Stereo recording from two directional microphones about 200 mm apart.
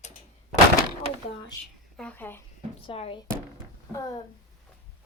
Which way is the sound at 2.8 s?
25° left (ahead or behind).